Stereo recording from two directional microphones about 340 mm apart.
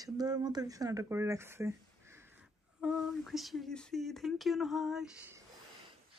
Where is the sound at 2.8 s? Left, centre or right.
Centre.